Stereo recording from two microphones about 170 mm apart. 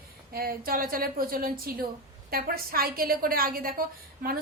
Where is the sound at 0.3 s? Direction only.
60° right (ahead or behind).